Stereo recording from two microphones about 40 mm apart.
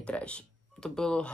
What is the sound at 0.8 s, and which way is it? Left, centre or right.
Speech, centre.